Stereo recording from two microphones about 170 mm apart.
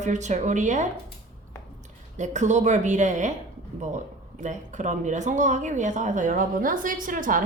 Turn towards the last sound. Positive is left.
turn(degrees=-55)  # may be behind; listen again after turning